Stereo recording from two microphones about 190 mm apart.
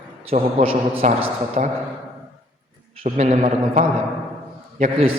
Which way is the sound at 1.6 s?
40° right (ahead or behind).